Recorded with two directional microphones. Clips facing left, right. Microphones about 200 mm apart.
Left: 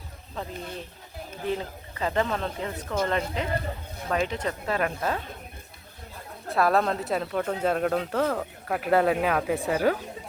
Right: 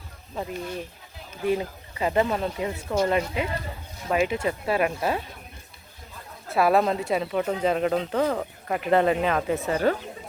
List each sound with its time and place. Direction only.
0.3 s speech: 10° right (ahead or behind)
6.5 s speech: 5° right (ahead or behind)